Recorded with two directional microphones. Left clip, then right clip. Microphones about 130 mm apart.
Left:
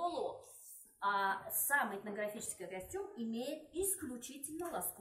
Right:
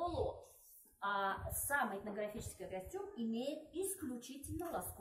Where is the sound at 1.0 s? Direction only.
15° right (ahead or behind).